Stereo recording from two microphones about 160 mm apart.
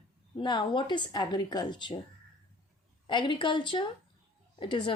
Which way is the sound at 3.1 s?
30° left (ahead or behind).